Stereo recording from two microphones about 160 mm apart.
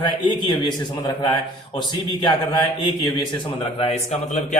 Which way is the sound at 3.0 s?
30° left (ahead or behind).